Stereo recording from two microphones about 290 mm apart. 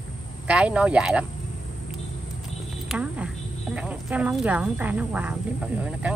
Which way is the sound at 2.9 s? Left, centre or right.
Centre.